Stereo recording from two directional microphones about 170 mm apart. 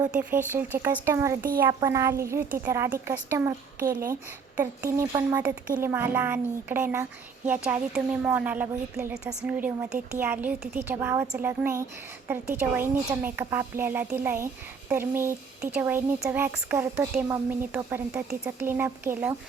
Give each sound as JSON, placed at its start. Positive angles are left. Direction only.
{"t": 0.1, "sound": "speech", "side_deg": -10}